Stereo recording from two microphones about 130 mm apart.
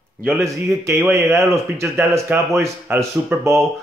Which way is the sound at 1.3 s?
20° right (ahead or behind).